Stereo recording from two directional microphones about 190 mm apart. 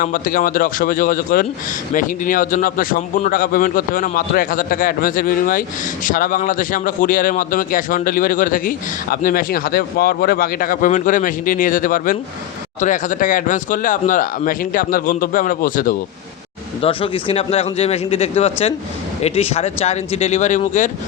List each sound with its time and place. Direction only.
0.0 s a man's voice: 45° left (ahead or behind)
16.8 s speech: 25° left (ahead or behind)